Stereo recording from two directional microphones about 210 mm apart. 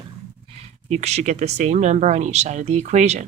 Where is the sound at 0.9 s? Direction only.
30° right (ahead or behind).